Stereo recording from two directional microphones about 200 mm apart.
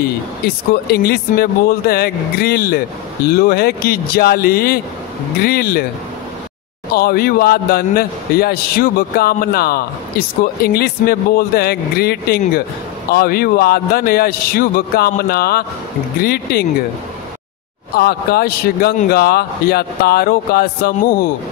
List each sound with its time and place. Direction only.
0.8 s a man's voice: 50° left (ahead or behind)
6.9 s a man's voice: 50° left (ahead or behind)
17.9 s a man's voice: 50° left (ahead or behind)